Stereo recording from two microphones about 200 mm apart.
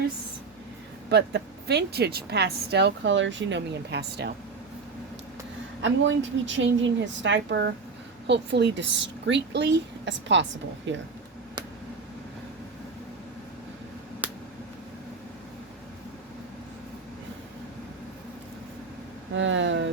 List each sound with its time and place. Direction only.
1.1 s speech: 55° right (ahead or behind)
5.8 s speech: 65° right (ahead or behind)
14.2 s a sound: 10° right (ahead or behind)
19.4 s speech: 70° right (ahead or behind)